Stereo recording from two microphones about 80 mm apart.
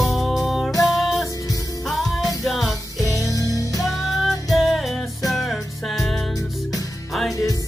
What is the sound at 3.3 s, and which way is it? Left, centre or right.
Music, left.